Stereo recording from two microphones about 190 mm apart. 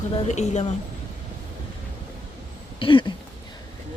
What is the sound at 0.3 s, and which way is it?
Speech, 35° left (ahead or behind).